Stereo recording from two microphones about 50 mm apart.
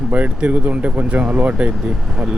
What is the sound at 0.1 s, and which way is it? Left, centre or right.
Speech, right.